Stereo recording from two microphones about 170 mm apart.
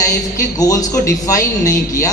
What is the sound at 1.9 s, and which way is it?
Speech, 20° left (ahead or behind).